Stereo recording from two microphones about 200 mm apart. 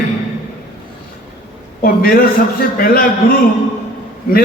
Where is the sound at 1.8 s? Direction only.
45° left (ahead or behind).